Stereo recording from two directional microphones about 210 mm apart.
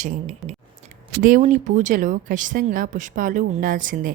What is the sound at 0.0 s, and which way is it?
Speech, 35° right (ahead or behind).